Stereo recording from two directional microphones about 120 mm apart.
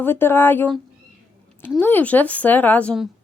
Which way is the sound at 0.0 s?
20° left (ahead or behind).